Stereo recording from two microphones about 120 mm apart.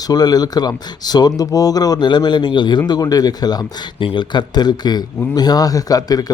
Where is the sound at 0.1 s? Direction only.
35° left (ahead or behind).